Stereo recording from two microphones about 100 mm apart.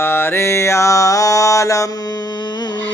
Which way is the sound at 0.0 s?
25° left (ahead or behind).